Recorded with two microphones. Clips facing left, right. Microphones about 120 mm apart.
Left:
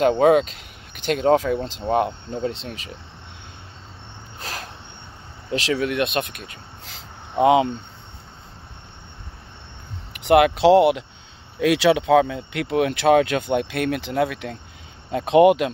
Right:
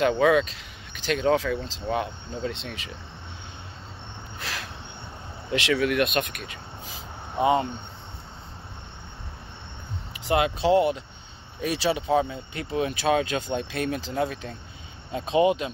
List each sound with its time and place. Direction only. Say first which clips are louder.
0.0 s speech: left 5 dB; 45° left (ahead or behind)
4.4 s a sound: left 2 dB; 45° left (ahead or behind)
5.5 s speech: left 1 dB; 35° left (ahead or behind)
7.4 s speech: left 6 dB; 90° left
10.1 s speech: left 8 dB; 65° left (ahead or behind)
11.6 s speech: left 8 dB; 90° left
12.5 s speech: left 6 dB; 70° left (ahead or behind)